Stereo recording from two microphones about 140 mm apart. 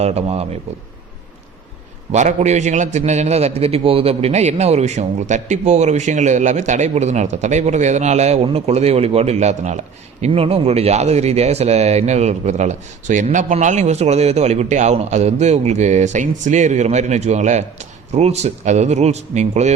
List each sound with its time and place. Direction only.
0.0 s a man's voice: 50° right (ahead or behind)
2.1 s a man's voice: 55° right (ahead or behind)